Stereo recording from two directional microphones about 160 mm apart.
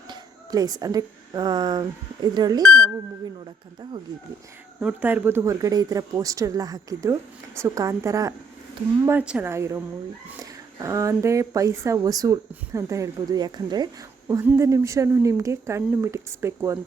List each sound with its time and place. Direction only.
0.1 s speech: 25° right (ahead or behind)
4.8 s speech: 10° right (ahead or behind)
9.0 s a woman's voice: 10° right (ahead or behind)